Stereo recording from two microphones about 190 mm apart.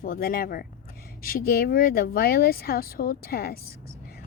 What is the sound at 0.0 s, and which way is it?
A woman's voice, 50° left (ahead or behind).